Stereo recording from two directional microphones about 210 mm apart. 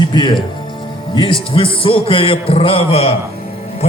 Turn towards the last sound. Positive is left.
turn(degrees=30)  # may be behind; listen again after turning